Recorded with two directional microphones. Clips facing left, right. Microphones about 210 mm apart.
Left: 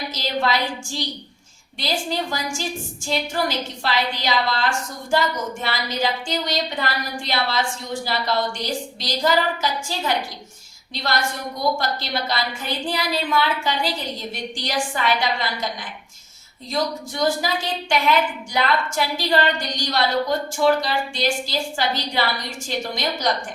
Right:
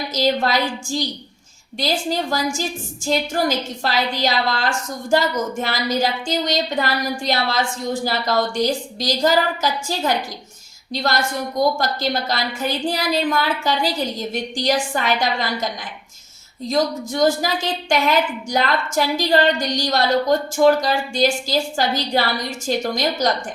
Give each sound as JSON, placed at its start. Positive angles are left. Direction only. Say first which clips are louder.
{"t": 0.1, "sound": "a woman's voice", "louder": "right 5 dB", "side_deg": -45}
{"t": 16.6, "sound": "a woman's voice", "louder": "right 5 dB", "side_deg": -45}